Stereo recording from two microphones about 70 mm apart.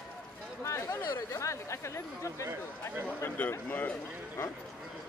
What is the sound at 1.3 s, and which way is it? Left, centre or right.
Speech, left.